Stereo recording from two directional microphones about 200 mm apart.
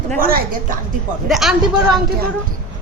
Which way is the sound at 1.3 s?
Centre (ahead or behind).